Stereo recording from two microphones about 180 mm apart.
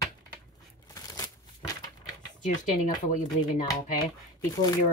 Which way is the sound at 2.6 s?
40° left (ahead or behind).